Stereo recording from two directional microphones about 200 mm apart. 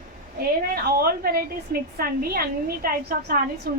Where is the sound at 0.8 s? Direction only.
50° right (ahead or behind).